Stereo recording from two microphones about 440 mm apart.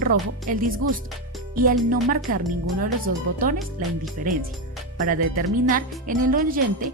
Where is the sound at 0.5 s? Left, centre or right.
Centre.